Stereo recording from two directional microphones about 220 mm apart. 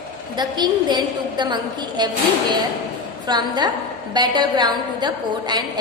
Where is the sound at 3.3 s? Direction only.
20° right (ahead or behind).